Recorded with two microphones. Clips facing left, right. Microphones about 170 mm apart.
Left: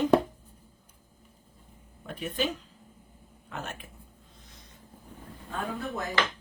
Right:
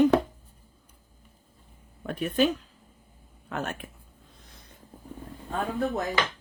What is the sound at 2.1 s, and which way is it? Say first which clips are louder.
Speech: right 7 dB; 65° right (ahead or behind).